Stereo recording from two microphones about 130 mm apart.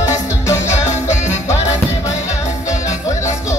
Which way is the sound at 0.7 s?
65° left (ahead or behind).